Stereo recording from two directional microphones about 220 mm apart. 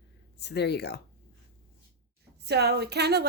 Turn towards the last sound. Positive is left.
turn(degrees=-50)  # may be behind; listen again after turning